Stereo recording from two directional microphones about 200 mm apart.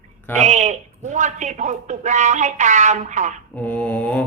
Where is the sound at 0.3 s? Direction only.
35° right (ahead or behind).